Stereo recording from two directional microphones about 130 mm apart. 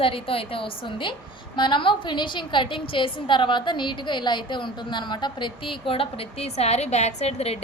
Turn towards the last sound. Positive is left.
turn(degrees=55)  # may be behind; listen again after turning